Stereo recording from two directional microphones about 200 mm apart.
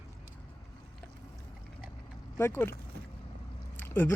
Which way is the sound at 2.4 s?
10° left (ahead or behind).